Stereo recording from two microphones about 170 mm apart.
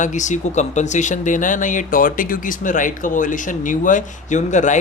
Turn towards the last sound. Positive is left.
turn(degrees=45)  # may be behind; listen again after turning